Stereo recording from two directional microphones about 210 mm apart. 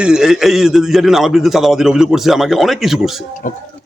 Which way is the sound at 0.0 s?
5° right (ahead or behind).